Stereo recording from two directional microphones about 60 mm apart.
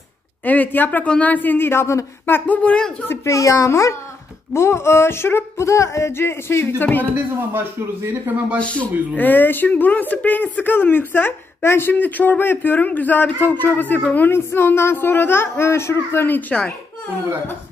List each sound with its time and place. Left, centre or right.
0.5 s speech: left
2.4 s speech: left
3.3 s a child's voice: left
7.8 s speech: right
8.5 s speech: left